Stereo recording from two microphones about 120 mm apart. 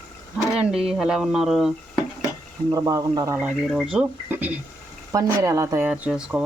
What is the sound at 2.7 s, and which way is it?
Speech, 30° right (ahead or behind).